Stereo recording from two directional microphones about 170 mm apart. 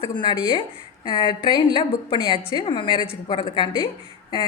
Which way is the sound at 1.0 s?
25° left (ahead or behind).